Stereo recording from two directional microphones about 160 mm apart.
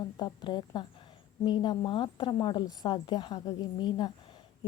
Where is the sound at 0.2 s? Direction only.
30° left (ahead or behind).